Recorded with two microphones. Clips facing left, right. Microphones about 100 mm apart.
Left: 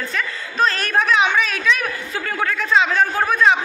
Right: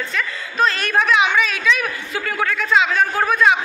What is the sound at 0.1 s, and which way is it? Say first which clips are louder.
A woman's voice: even; 40° left (ahead or behind).